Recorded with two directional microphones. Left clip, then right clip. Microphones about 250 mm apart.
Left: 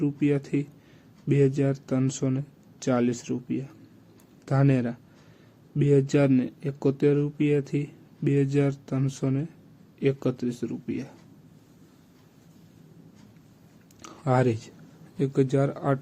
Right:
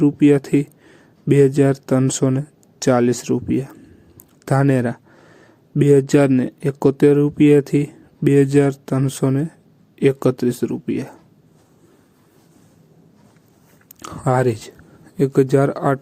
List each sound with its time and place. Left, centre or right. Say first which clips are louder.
0.0 s speech: right 12 dB; right
14.0 s speech: right 7 dB; right